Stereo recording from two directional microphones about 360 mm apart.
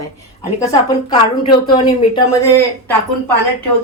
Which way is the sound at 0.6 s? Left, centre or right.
Centre.